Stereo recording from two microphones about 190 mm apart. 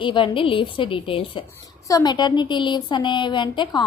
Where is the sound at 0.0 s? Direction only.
25° left (ahead or behind).